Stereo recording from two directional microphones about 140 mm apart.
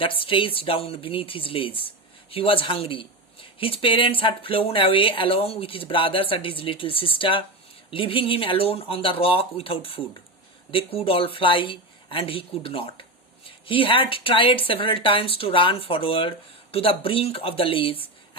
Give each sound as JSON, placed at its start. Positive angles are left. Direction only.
{"t": 0.0, "sound": "speech", "side_deg": 40}